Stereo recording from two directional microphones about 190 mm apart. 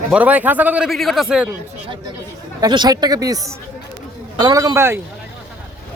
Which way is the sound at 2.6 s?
20° right (ahead or behind).